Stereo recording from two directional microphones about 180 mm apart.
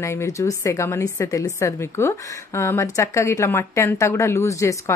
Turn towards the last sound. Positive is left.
turn(degrees=15)  # may be behind; listen again after turning